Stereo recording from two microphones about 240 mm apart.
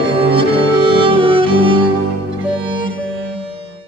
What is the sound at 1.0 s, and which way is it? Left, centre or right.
Music, right.